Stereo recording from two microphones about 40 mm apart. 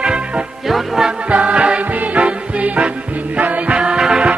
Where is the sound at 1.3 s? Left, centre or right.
Right.